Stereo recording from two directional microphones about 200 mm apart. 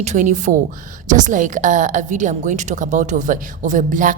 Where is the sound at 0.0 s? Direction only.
35° right (ahead or behind).